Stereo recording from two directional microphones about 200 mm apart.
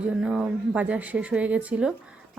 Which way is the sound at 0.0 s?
5° right (ahead or behind).